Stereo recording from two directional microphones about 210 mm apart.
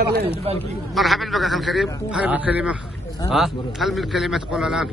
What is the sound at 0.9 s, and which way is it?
A man's voice, centre (ahead or behind).